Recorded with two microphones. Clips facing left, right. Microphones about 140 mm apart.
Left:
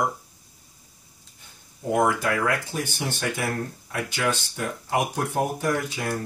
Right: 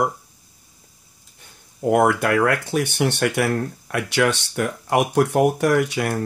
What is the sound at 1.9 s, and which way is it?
Speech, 70° right (ahead or behind).